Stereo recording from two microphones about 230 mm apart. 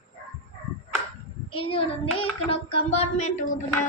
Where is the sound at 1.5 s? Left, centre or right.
Left.